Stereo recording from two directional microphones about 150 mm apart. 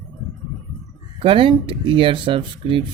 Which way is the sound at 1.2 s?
35° right (ahead or behind).